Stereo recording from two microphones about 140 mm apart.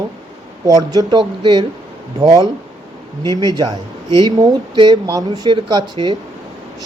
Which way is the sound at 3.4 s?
30° right (ahead or behind).